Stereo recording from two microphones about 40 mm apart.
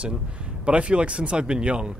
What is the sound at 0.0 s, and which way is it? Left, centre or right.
Speech, right.